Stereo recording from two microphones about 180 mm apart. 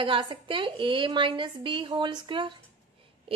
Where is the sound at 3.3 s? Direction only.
30° right (ahead or behind).